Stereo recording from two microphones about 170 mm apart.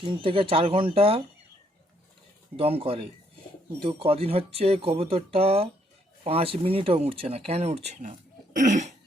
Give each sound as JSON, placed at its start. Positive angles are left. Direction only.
{"t": 0.0, "sound": "speech", "side_deg": -30}
{"t": 2.6, "sound": "speech", "side_deg": -35}
{"t": 8.5, "sound": "cough", "side_deg": -45}